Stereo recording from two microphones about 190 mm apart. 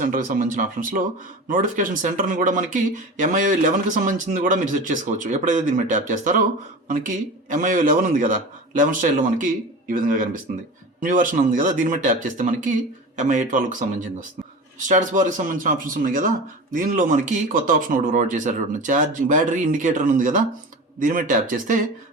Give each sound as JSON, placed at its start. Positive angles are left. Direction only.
{"t": 0.0, "sound": "speech", "side_deg": -45}